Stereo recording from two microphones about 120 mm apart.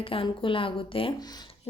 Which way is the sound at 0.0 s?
50° left (ahead or behind).